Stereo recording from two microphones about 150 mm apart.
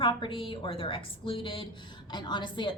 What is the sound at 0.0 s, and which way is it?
A woman's voice, 35° left (ahead or behind).